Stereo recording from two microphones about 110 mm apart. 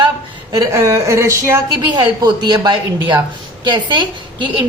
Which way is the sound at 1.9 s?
40° right (ahead or behind).